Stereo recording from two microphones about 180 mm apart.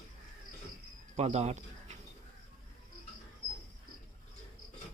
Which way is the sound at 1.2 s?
35° right (ahead or behind).